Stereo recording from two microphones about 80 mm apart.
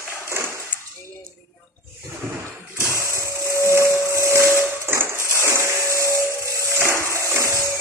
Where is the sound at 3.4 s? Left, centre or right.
Right.